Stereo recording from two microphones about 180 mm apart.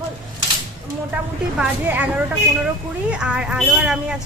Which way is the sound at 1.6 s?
10° right (ahead or behind).